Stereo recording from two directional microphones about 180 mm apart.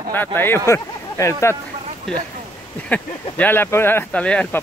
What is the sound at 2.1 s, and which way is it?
Speech, centre (ahead or behind).